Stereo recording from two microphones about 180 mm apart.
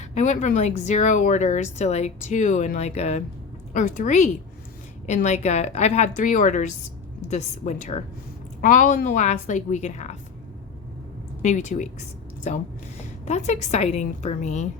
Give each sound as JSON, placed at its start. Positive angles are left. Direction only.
{"t": 0.1, "sound": "a woman's voice", "side_deg": 40}
{"t": 11.4, "sound": "speech", "side_deg": 40}